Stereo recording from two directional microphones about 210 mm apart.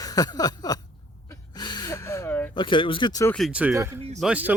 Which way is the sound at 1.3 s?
20° left (ahead or behind).